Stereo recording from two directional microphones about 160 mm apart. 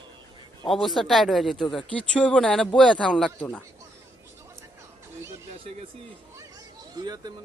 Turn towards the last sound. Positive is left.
turn(degrees=-25)  # may be behind; listen again after turning